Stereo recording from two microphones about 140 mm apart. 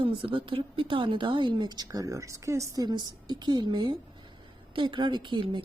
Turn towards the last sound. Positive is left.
turn(degrees=-35)  # may be behind; listen again after turning